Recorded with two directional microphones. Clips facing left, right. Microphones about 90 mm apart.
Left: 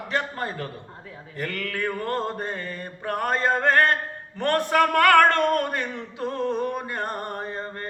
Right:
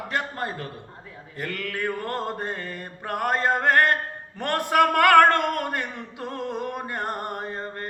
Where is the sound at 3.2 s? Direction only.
15° right (ahead or behind).